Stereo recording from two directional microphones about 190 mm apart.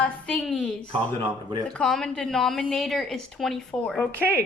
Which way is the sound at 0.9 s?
25° right (ahead or behind).